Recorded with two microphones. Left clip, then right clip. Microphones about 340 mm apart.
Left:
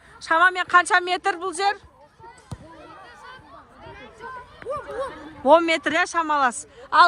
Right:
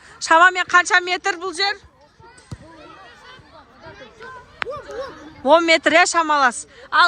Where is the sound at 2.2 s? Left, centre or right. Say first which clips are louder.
Even; left.